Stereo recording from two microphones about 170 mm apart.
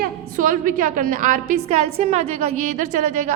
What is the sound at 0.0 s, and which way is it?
A woman's voice, 50° right (ahead or behind).